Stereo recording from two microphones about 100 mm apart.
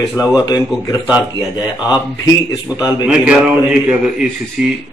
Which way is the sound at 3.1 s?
10° right (ahead or behind).